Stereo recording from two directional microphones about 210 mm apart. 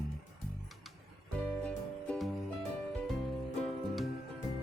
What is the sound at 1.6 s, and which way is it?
Music, 5° left (ahead or behind).